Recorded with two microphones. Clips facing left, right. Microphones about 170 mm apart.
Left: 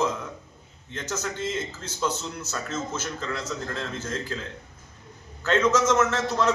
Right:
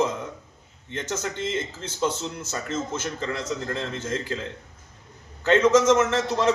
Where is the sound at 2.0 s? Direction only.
30° right (ahead or behind).